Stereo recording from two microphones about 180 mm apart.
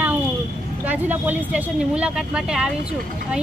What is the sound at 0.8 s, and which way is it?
Speech, 10° right (ahead or behind).